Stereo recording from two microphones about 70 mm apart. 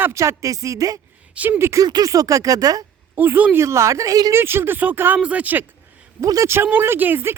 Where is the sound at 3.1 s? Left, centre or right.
Right.